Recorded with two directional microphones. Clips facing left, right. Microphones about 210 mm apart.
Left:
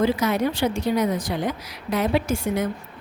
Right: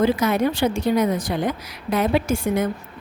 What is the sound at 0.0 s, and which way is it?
Speech, 50° right (ahead or behind).